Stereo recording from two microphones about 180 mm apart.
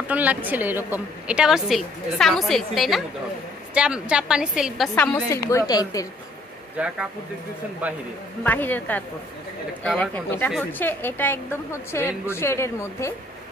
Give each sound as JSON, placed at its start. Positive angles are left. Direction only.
{"t": 0.0, "sound": "a woman's voice", "side_deg": -10}
{"t": 4.9, "sound": "a woman's voice", "side_deg": 10}
{"t": 6.8, "sound": "a woman's voice", "side_deg": -5}
{"t": 8.5, "sound": "a woman's voice", "side_deg": 10}